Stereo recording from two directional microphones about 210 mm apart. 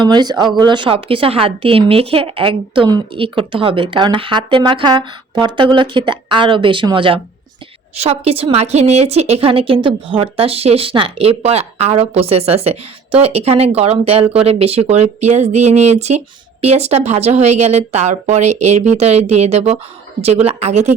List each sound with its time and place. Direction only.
0.0 s a woman's voice: 20° right (ahead or behind)